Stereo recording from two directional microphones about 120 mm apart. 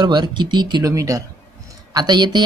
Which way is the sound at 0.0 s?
40° right (ahead or behind).